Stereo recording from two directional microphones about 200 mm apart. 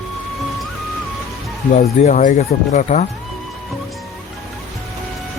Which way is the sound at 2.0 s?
40° left (ahead or behind).